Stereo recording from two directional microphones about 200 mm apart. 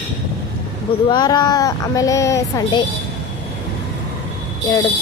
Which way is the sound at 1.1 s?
20° left (ahead or behind).